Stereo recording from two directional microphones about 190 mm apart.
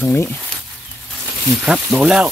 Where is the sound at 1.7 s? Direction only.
5° right (ahead or behind).